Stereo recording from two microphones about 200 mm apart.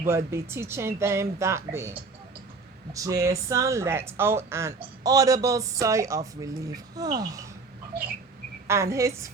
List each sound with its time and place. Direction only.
0.0 s speech: 15° right (ahead or behind)
8.6 s speech: 15° right (ahead or behind)